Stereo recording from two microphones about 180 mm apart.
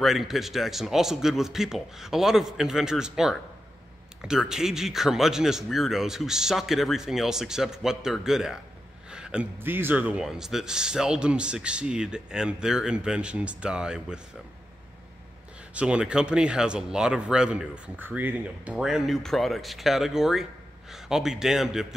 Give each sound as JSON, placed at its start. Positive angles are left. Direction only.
{"t": 0.0, "sound": "speech", "side_deg": 0}
{"t": 15.7, "sound": "speech", "side_deg": -5}